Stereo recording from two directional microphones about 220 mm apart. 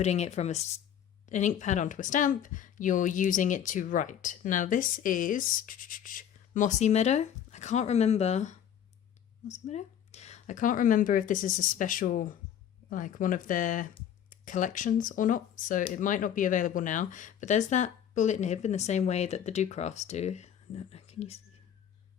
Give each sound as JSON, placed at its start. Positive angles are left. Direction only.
{"t": 0.0, "sound": "speech", "side_deg": 30}